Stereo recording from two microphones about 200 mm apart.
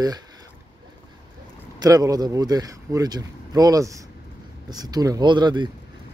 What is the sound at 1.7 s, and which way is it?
Speech, 20° right (ahead or behind).